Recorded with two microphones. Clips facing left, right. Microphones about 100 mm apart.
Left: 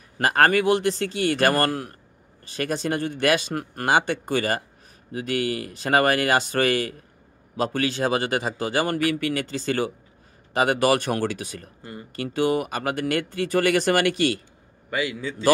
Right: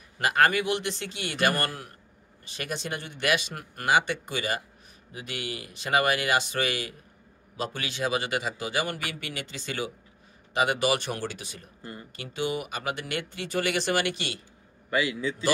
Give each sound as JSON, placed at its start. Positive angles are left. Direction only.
{"t": 0.2, "sound": "a man's voice", "side_deg": 45}